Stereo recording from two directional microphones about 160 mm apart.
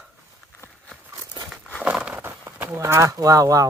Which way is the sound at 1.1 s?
25° right (ahead or behind).